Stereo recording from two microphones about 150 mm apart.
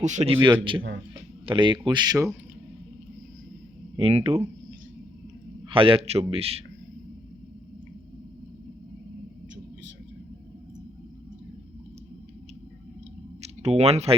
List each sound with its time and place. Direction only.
0.0 s speech: 50° right (ahead or behind)
0.4 s a man's voice: 35° right (ahead or behind)
3.9 s a man's voice: 40° right (ahead or behind)
5.6 s a man's voice: 35° right (ahead or behind)
13.6 s speech: 45° right (ahead or behind)